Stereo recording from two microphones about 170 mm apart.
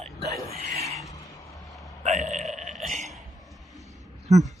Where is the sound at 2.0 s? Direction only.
45° right (ahead or behind).